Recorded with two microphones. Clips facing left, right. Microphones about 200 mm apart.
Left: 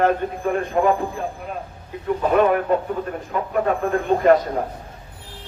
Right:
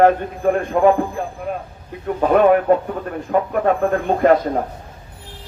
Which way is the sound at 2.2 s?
55° right (ahead or behind).